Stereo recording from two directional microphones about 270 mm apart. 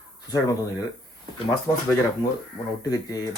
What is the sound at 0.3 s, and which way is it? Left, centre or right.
Speech, centre.